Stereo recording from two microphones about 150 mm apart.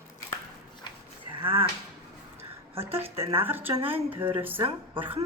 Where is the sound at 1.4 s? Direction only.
35° right (ahead or behind).